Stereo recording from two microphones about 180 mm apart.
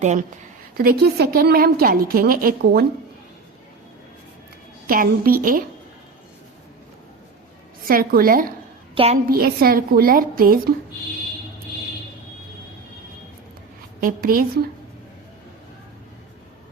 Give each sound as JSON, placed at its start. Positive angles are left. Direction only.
{"t": 0.0, "sound": "speech", "side_deg": -40}
{"t": 0.8, "sound": "a woman's voice", "side_deg": -60}
{"t": 4.9, "sound": "a woman's voice", "side_deg": -55}
{"t": 7.9, "sound": "a woman's voice", "side_deg": -55}
{"t": 14.0, "sound": "a woman's voice", "side_deg": -55}